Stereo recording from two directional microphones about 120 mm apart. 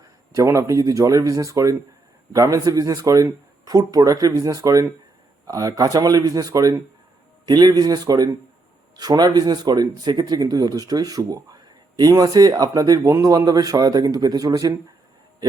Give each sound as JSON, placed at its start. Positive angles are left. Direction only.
{"t": 0.3, "sound": "speech", "side_deg": -25}